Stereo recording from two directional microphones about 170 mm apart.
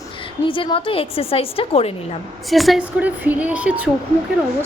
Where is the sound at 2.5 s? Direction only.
Centre (ahead or behind).